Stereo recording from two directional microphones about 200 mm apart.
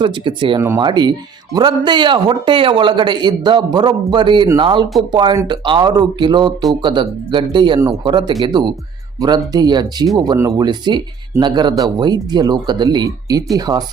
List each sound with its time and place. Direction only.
0.0 s a man's voice: 25° right (ahead or behind)